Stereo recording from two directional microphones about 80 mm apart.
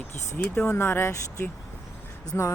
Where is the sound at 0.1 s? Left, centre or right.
Left.